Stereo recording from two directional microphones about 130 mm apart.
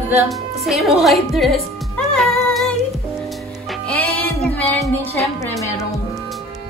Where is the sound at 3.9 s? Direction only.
10° left (ahead or behind).